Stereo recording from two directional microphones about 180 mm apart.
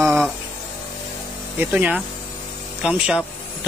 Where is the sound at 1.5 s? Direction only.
10° right (ahead or behind).